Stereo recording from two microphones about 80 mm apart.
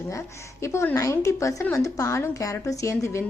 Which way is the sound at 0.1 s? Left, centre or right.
Left.